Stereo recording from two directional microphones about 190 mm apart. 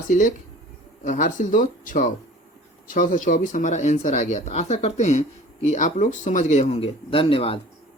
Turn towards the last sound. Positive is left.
turn(degrees=30)  # may be behind; listen again after turning